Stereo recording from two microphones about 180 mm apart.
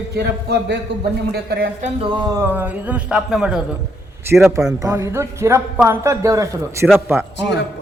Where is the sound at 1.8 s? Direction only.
30° right (ahead or behind); by 3.7 s 5° right (ahead or behind).